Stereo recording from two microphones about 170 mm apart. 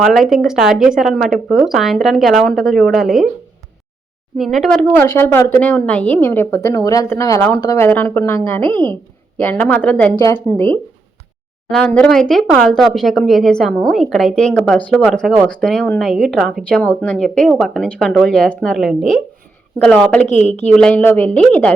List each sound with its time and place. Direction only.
0.0 s speech: centre (ahead or behind)
4.4 s speech: centre (ahead or behind); by 8.6 s 20° left (ahead or behind)
8.7 s speech: 25° right (ahead or behind)
9.4 s speech: 10° left (ahead or behind)
10.2 s speech: 20° left (ahead or behind)
11.7 s speech: 5° left (ahead or behind)
20.7 s speech: 10° left (ahead or behind)